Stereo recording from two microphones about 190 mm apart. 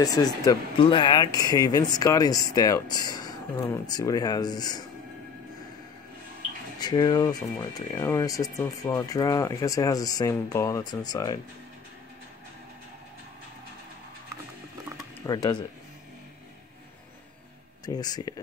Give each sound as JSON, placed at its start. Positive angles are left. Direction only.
{"t": 0.0, "sound": "speech", "side_deg": 20}
{"t": 6.8, "sound": "speech", "side_deg": 20}
{"t": 15.2, "sound": "speech", "side_deg": 20}
{"t": 17.8, "sound": "speech", "side_deg": 20}